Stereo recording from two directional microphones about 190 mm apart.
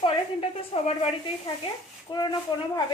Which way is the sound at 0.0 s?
30° left (ahead or behind).